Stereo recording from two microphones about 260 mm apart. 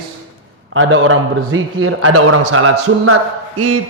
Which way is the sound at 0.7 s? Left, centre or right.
Right.